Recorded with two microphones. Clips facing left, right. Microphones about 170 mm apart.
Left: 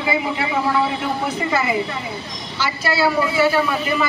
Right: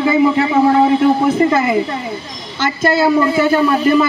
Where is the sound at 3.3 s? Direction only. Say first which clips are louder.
Right 5 dB; 40° right (ahead or behind).